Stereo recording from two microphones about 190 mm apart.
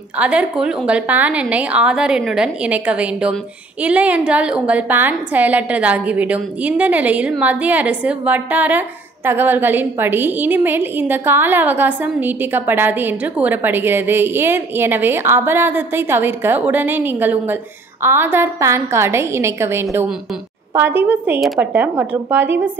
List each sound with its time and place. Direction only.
0.2 s a woman's voice: 5° right (ahead or behind)